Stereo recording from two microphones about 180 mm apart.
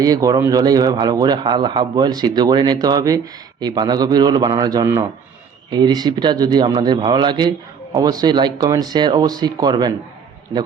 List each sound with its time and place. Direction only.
0.0 s speech: 20° right (ahead or behind)